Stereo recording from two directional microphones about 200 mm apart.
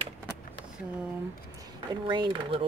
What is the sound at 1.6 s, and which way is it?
Speech, 25° right (ahead or behind).